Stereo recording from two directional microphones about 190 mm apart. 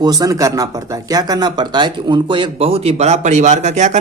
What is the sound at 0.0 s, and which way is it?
Speech, 20° right (ahead or behind).